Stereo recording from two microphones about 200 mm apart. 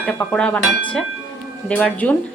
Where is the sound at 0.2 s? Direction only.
5° left (ahead or behind).